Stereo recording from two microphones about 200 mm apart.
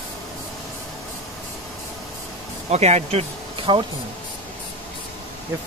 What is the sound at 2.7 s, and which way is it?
Speech, 35° right (ahead or behind).